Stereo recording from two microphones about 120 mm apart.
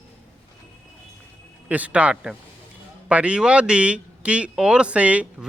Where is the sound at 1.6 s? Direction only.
10° right (ahead or behind).